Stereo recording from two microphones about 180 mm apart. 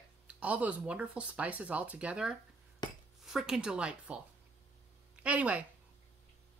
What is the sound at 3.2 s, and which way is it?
Speech, 5° right (ahead or behind).